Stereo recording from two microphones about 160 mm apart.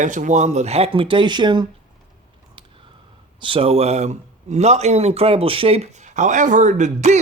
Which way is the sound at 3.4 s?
35° right (ahead or behind).